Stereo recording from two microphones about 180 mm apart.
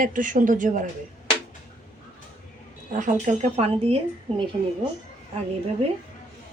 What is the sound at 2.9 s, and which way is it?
Speech, 45° right (ahead or behind).